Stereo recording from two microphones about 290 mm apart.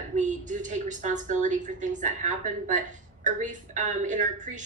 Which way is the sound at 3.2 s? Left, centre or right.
Right.